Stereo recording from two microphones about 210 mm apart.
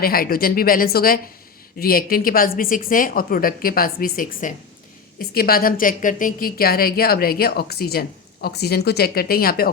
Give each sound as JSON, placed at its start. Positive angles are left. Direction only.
{"t": 0.0, "sound": "a woman's voice", "side_deg": 45}